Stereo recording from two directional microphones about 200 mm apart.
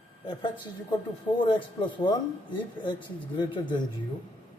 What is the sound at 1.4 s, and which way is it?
Speech, 25° left (ahead or behind).